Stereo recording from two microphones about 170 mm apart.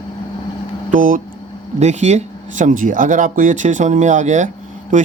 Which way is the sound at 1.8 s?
40° right (ahead or behind).